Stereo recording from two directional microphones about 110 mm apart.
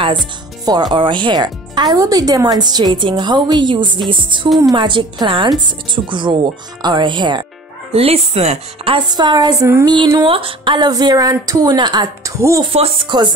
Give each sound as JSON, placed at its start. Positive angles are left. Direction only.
{"t": 0.7, "sound": "speech", "side_deg": -45}
{"t": 7.9, "sound": "speech", "side_deg": -65}
{"t": 8.9, "sound": "speech", "side_deg": -40}
{"t": 12.4, "sound": "speech", "side_deg": -25}
{"t": 12.7, "sound": "speech", "side_deg": -65}